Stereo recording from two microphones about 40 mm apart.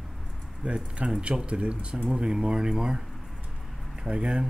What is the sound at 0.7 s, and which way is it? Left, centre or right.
Speech, right.